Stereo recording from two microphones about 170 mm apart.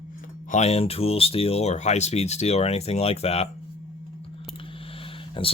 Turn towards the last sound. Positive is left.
turn(degrees=30)  # may be behind; listen again after turning